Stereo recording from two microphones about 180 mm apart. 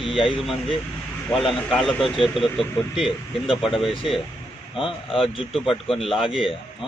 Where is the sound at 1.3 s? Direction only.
30° left (ahead or behind).